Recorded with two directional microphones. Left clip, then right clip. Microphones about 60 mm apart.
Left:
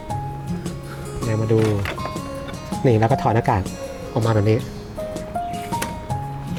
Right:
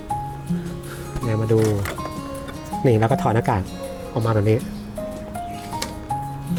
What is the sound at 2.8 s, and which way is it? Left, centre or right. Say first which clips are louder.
Speech: left 1 dB; right.